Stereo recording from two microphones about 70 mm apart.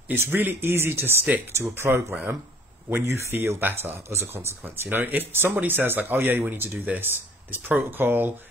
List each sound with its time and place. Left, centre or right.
0.1 s speech: right